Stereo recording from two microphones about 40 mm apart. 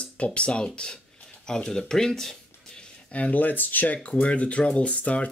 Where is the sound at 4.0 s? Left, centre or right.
Left.